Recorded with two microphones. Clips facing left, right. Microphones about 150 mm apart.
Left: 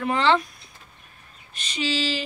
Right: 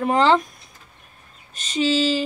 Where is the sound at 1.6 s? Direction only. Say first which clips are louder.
Right 7 dB; 45° right (ahead or behind).